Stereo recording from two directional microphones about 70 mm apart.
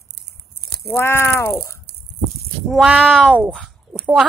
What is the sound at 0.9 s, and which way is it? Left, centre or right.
Speech, left.